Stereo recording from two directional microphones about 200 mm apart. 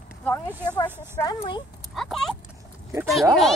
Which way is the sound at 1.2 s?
25° left (ahead or behind).